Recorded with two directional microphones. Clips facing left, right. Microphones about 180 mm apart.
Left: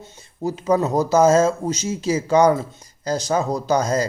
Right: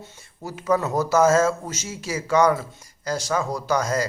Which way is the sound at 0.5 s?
20° left (ahead or behind).